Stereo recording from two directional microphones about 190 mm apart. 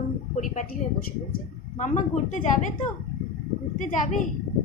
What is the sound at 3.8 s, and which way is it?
Speech, 40° left (ahead or behind).